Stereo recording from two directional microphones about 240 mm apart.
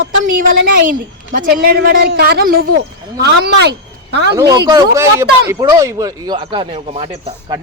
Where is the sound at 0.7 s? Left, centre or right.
Right.